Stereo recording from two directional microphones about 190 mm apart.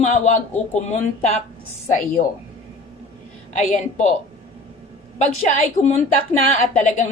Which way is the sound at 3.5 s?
40° left (ahead or behind).